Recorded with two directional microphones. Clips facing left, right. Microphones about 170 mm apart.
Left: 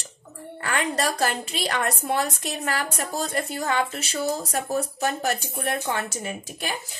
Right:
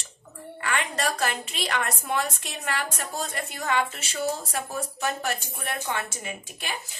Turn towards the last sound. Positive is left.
turn(degrees=40)  # may be behind; listen again after turning